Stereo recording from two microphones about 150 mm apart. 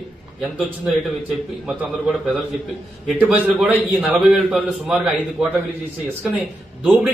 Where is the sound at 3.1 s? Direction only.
10° right (ahead or behind).